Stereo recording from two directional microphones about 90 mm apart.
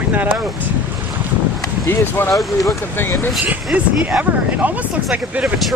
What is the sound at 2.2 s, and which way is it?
Speech, 25° left (ahead or behind).